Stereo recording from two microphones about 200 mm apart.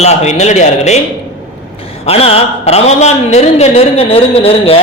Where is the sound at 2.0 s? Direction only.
30° left (ahead or behind).